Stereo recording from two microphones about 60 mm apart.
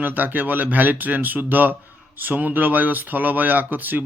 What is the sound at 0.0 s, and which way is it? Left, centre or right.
Speech, right.